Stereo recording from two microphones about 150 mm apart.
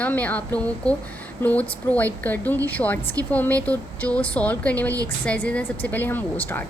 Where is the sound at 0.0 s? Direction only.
10° left (ahead or behind).